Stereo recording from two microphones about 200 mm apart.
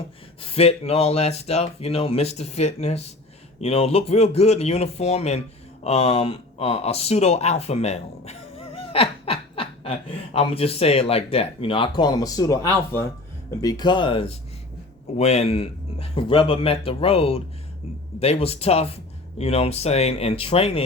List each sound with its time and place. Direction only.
0.4 s speech: 30° left (ahead or behind)